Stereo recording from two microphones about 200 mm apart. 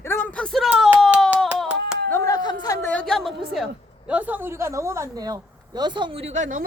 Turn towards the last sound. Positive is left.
turn(degrees=-35)  # may be behind; listen again after turning